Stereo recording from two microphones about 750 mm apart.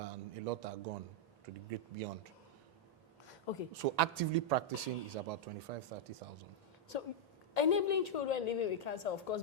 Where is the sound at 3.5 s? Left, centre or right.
Left.